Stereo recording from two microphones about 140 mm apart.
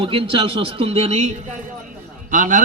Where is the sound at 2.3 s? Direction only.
65° right (ahead or behind).